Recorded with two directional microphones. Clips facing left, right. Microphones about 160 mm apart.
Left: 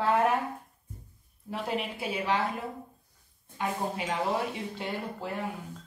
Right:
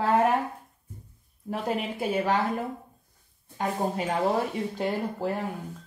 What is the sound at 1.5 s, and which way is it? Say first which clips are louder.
Speech: right 3 dB; 45° right (ahead or behind).